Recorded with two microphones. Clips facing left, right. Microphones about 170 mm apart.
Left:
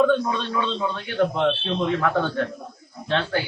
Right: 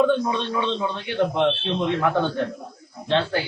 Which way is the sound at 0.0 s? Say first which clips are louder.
Even; 20° right (ahead or behind).